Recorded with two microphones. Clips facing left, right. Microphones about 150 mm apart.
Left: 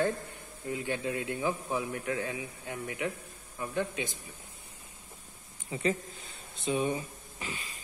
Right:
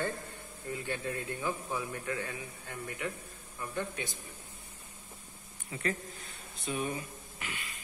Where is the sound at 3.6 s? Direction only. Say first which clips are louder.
Left 4 dB; 20° left (ahead or behind).